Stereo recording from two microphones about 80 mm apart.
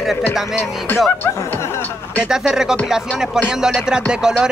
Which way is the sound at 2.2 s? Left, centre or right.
Centre.